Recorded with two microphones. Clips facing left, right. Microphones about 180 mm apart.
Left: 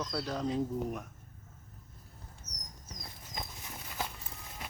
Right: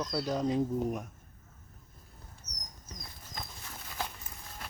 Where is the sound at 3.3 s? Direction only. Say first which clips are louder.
Left 1 dB; 15° left (ahead or behind).